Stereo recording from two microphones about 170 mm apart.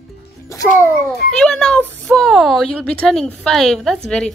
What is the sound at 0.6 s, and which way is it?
Speech, 15° left (ahead or behind).